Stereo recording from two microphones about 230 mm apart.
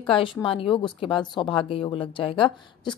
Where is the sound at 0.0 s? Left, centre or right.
Left.